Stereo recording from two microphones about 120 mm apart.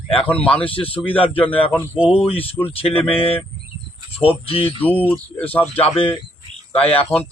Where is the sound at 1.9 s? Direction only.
10° right (ahead or behind).